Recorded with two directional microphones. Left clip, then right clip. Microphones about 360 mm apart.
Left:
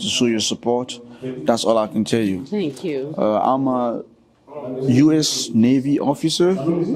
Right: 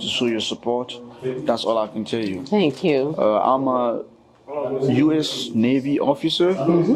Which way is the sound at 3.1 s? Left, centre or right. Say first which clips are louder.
Left 4 dB; left.